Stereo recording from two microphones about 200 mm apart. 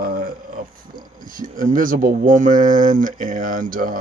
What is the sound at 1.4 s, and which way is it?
Speech, 40° right (ahead or behind).